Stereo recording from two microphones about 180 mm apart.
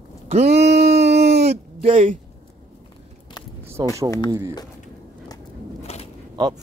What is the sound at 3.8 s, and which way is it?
Speech, 20° right (ahead or behind).